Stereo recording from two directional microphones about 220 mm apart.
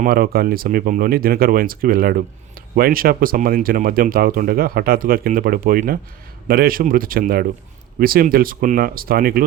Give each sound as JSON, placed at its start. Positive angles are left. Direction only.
{"t": 0.0, "sound": "speech", "side_deg": -45}